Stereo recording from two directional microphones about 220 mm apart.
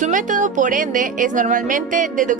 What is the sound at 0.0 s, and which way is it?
Speech, 35° right (ahead or behind).